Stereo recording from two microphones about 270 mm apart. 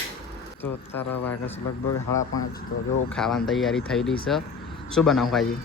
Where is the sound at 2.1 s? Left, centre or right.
Left.